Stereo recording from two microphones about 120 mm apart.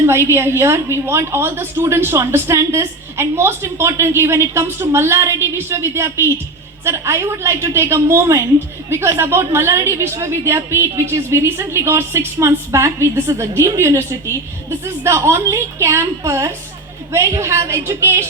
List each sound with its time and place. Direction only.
0.0 s a woman's voice: 20° right (ahead or behind)